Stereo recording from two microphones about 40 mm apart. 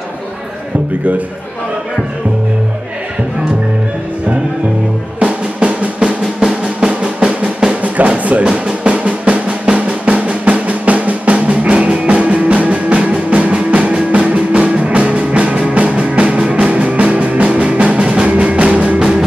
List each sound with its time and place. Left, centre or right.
5.2 s drum: right
6.4 s drum: centre
8.2 s music: right
8.8 s drum: right
18.9 s music: centre